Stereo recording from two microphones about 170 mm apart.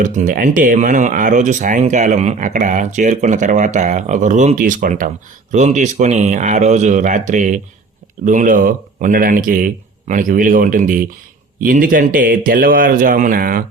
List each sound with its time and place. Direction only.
0.0 s a man's voice: 50° right (ahead or behind)